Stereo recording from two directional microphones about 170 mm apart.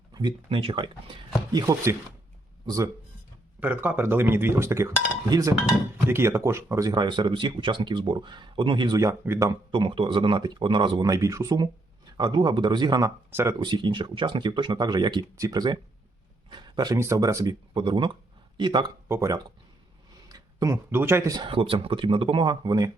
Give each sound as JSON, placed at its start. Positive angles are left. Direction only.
{"t": 0.1, "sound": "speech", "side_deg": -25}
{"t": 1.5, "sound": "speech", "side_deg": -20}
{"t": 9.7, "sound": "speech", "side_deg": -30}
{"t": 13.6, "sound": "speech", "side_deg": -25}
{"t": 19.0, "sound": "speech", "side_deg": -15}